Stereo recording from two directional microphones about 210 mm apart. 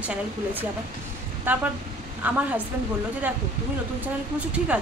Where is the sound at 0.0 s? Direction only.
5° right (ahead or behind).